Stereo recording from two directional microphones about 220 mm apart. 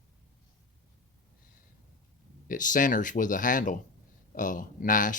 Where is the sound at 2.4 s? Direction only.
35° left (ahead or behind).